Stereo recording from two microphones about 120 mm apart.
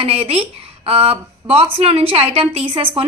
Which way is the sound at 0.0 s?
50° right (ahead or behind).